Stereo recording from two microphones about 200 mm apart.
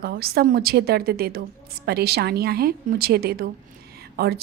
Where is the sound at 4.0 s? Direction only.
50° right (ahead or behind).